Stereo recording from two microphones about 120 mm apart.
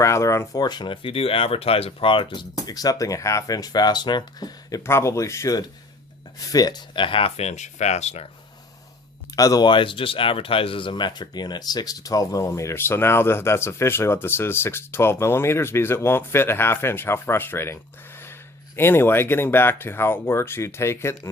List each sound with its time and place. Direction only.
0.0 s speech: 25° left (ahead or behind)
4.8 s speech: 20° left (ahead or behind); by 8.3 s 65° left (ahead or behind)
9.3 s speech: 30° left (ahead or behind)
9.6 s speech: 45° left (ahead or behind); by 17.7 s 20° left (ahead or behind)
18.8 s speech: 20° left (ahead or behind)